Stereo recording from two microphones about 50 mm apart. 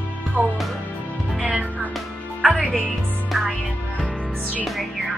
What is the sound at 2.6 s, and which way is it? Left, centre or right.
Music, right.